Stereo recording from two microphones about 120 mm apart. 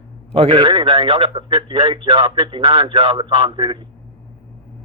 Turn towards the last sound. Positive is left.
turn(degrees=-45)  # may be behind; listen again after turning